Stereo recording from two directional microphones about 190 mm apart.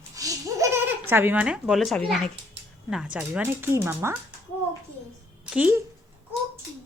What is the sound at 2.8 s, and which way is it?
Speech, 5° right (ahead or behind).